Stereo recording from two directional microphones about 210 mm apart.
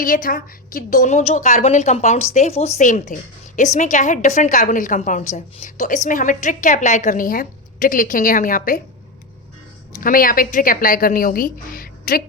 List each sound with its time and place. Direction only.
0.0 s a woman's voice: 40° left (ahead or behind)
10.0 s a woman's voice: 40° left (ahead or behind)